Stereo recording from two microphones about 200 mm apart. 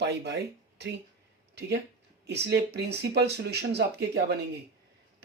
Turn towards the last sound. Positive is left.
turn(degrees=-55)  # may be behind; listen again after turning